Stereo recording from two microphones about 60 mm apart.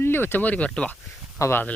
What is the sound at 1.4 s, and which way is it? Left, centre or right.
Speech, left.